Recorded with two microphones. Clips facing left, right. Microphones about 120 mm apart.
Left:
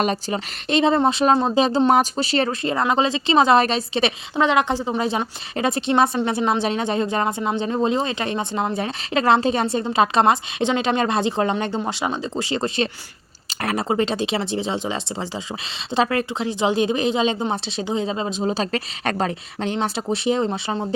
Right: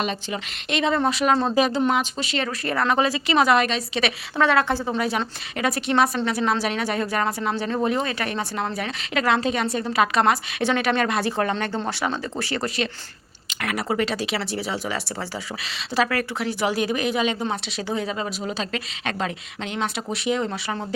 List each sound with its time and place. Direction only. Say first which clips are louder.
0.0 s a woman's voice: left 5 dB; 40° left (ahead or behind)
1.4 s speech: left 2 dB; 15° left (ahead or behind)
1.6 s a woman's voice: left 5 dB; 30° left (ahead or behind)
2.6 s a woman's voice: right 2 dB; 20° left (ahead or behind)